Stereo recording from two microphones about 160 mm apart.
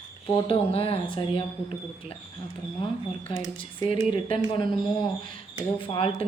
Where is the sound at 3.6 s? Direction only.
35° left (ahead or behind).